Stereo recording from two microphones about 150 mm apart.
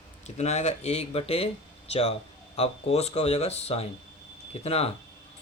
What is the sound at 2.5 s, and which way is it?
Speech, 45° left (ahead or behind).